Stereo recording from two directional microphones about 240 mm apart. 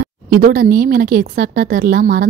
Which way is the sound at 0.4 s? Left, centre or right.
Right.